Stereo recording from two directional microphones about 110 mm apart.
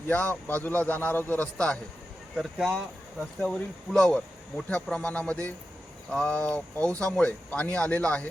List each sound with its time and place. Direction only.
0.1 s speech: 15° left (ahead or behind)
2.3 s speech: centre (ahead or behind)